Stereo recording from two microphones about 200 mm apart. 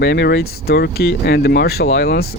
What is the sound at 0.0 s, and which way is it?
Speech, 60° left (ahead or behind).